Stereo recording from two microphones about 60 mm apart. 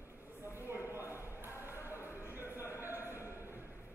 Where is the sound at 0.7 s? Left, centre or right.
Right.